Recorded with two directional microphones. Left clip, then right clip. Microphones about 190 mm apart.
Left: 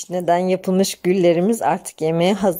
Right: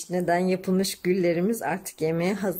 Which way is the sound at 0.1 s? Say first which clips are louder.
Left 6 dB; 35° left (ahead or behind).